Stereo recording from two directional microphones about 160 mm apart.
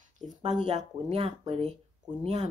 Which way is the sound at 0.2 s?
45° right (ahead or behind).